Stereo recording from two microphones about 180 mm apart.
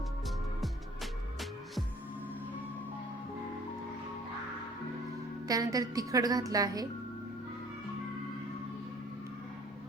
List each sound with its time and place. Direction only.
5.5 s a woman's voice: 20° right (ahead or behind)